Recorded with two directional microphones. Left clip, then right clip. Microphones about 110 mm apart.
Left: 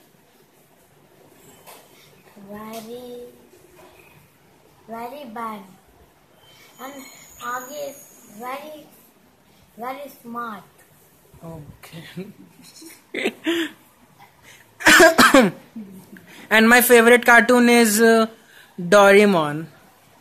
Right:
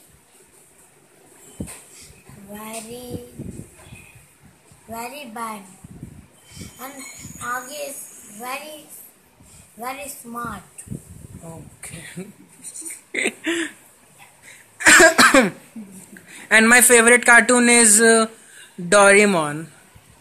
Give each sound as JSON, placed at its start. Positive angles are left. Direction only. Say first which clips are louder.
{"t": 2.5, "sound": "speech", "louder": "right 1 dB", "side_deg": 0}
{"t": 5.1, "sound": "speech", "louder": "even", "side_deg": 0}
{"t": 7.3, "sound": "speech", "louder": "right 1 dB", "side_deg": 0}
{"t": 9.8, "sound": "a woman's voice", "louder": "even", "side_deg": -5}
{"t": 12.8, "sound": "a sound", "louder": "right 2 dB", "side_deg": 15}
{"t": 14.5, "sound": "cough", "louder": "right 1 dB", "side_deg": 15}
{"t": 16.3, "sound": "speech", "louder": "right 1 dB", "side_deg": 15}